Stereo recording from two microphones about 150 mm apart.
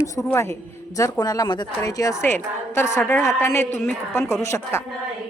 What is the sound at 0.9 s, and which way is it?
A woman's voice, 20° left (ahead or behind).